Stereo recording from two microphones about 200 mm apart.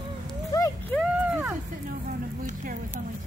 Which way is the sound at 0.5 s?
15° left (ahead or behind).